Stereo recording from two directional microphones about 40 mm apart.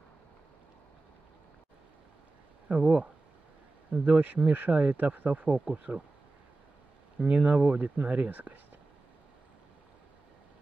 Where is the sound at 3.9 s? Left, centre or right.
Right.